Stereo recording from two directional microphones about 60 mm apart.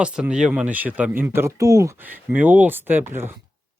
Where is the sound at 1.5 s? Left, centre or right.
Right.